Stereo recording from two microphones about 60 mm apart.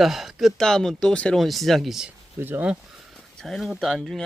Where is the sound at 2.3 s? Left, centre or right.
Right.